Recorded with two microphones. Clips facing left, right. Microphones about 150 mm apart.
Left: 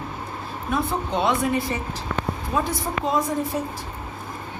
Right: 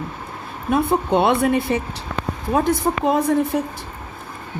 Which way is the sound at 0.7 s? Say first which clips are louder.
Right 7 dB; 55° right (ahead or behind).